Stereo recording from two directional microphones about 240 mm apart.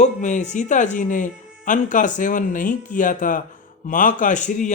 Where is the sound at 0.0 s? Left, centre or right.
Left.